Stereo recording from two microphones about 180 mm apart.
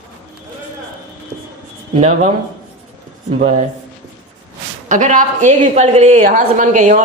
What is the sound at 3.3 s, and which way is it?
Speech, 45° right (ahead or behind).